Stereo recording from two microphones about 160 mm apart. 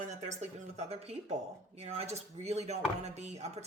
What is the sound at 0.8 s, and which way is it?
Speech, 40° right (ahead or behind).